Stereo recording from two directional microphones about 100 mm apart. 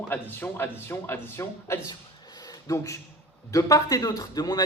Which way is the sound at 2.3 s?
40° left (ahead or behind).